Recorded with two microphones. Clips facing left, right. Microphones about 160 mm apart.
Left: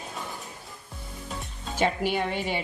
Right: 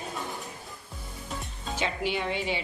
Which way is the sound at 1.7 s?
50° left (ahead or behind).